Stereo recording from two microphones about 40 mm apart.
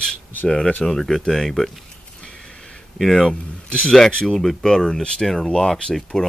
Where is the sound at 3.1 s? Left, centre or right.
Left.